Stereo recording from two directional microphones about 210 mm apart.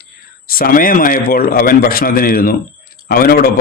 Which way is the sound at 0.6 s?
40° left (ahead or behind).